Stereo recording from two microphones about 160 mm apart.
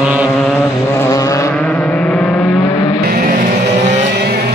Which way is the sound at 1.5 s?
10° left (ahead or behind).